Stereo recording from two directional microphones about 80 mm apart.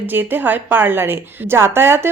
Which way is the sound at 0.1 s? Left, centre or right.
Right.